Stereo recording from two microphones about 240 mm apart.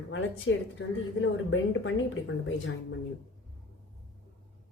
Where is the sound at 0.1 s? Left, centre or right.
Left.